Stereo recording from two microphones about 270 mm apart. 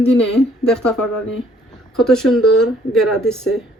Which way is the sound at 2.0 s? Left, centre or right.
Centre.